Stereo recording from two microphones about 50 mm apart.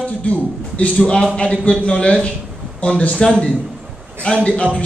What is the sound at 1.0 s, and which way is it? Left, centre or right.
A man's voice, centre.